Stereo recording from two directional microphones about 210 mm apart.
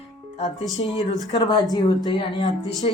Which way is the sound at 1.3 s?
20° left (ahead or behind).